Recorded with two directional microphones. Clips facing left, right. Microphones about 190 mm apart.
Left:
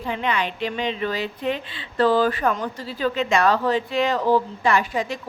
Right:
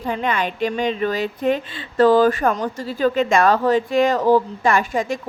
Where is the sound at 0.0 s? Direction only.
45° right (ahead or behind).